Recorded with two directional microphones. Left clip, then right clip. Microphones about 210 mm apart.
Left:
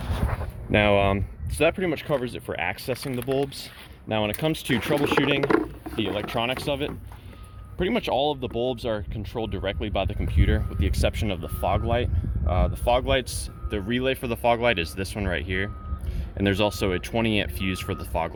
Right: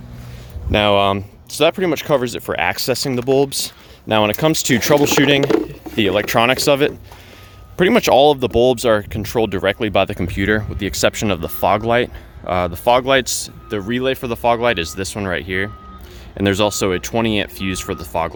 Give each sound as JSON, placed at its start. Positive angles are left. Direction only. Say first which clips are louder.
{"t": 0.7, "sound": "speech", "louder": "right 6 dB", "side_deg": -10}